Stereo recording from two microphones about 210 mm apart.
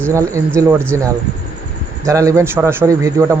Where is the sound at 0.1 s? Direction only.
15° right (ahead or behind).